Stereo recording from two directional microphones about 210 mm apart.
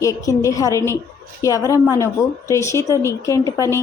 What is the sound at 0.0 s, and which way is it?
A woman's voice, 15° left (ahead or behind).